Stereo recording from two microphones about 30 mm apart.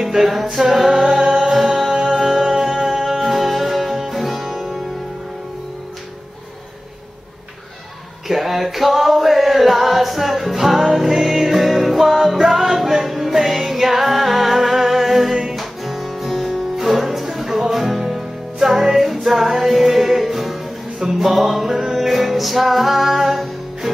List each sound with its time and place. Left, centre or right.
0.0 s a capella: centre
1.2 s music: centre
3.1 s music: centre
8.3 s male singing: centre
11.0 s music: centre
15.5 s guitar: centre
16.7 s music: centre